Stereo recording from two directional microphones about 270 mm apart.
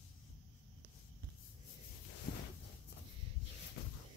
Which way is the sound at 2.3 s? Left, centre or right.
Left.